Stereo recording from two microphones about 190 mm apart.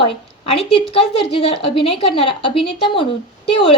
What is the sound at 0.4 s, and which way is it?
A woman's voice, 30° left (ahead or behind).